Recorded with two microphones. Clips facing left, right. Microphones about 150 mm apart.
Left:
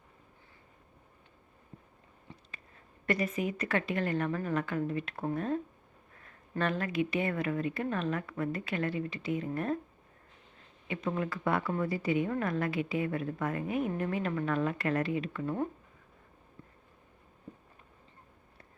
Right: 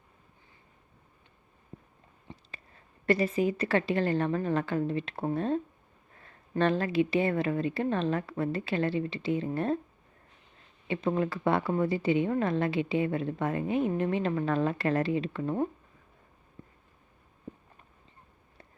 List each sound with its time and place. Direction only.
2.3 s a sound: 20° right (ahead or behind)
3.1 s a woman's voice: 30° right (ahead or behind)
10.8 s a woman's voice: 30° right (ahead or behind)